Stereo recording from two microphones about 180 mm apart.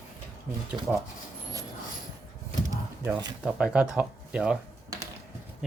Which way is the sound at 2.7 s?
20° right (ahead or behind).